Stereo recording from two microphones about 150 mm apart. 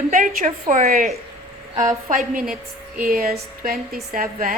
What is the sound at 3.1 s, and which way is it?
A woman's voice, 90° right.